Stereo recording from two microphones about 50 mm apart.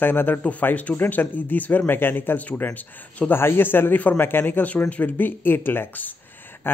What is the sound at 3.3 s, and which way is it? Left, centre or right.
A man's voice, left.